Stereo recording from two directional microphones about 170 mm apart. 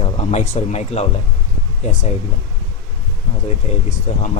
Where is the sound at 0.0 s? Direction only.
35° left (ahead or behind).